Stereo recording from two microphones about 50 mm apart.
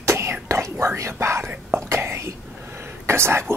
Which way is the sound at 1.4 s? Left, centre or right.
Right.